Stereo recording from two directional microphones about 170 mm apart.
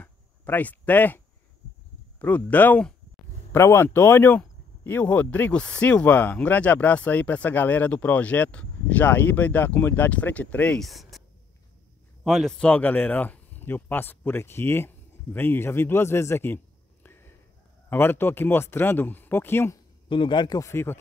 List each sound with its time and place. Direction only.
0.0 s a sound: 10° left (ahead or behind)
2.1 s speech: 10° left (ahead or behind)
12.3 s speech: centre (ahead or behind)
20.1 s speech: 30° left (ahead or behind)